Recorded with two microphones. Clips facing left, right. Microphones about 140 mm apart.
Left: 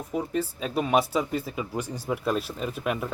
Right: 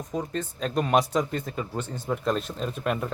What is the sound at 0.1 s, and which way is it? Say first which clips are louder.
A man's voice: left 3 dB; 10° left (ahead or behind).